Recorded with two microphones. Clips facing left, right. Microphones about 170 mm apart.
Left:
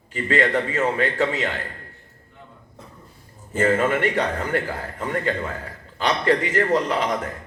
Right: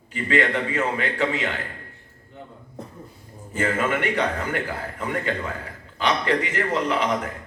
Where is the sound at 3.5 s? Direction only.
40° left (ahead or behind).